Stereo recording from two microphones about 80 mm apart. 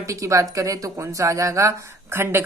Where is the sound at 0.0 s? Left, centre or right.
Right.